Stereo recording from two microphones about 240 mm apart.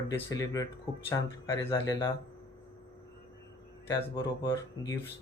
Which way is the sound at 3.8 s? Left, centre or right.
Centre.